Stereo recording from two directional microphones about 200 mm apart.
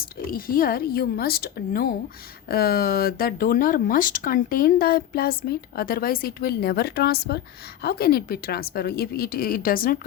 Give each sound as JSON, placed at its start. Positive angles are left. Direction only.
{"t": 0.0, "sound": "speech", "side_deg": 45}